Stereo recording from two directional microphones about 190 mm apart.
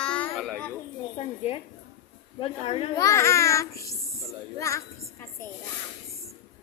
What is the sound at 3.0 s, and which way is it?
A child's voice, 15° left (ahead or behind).